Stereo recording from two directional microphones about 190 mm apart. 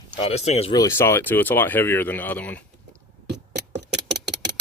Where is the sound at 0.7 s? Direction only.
15° left (ahead or behind).